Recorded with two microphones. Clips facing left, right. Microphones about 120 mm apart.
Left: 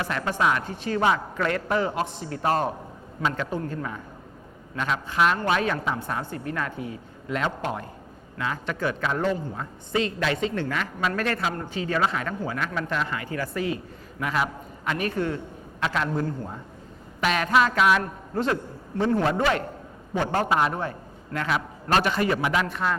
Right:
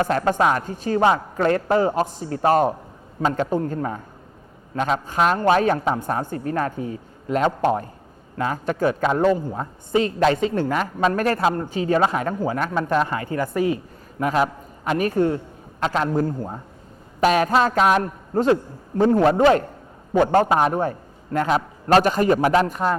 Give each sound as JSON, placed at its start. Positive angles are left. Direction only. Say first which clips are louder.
{"t": 0.0, "sound": "a woman's voice", "louder": "right 6 dB", "side_deg": -45}